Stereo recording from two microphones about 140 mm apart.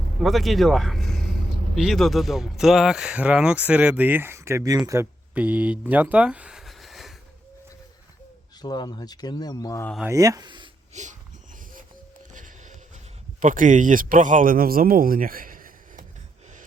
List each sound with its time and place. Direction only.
0.2 s speech: centre (ahead or behind)
5.9 s a sound: 10° right (ahead or behind)
8.6 s speech: 30° left (ahead or behind)
10.1 s speech: 25° right (ahead or behind)
10.9 s wheeze: 60° right (ahead or behind)
12.3 s a sound: 65° right (ahead or behind)
13.4 s speech: 70° right (ahead or behind)